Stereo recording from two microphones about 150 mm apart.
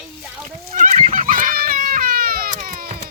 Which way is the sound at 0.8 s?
55° right (ahead or behind).